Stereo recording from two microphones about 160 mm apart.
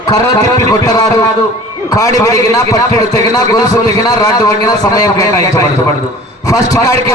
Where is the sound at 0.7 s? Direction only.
20° left (ahead or behind).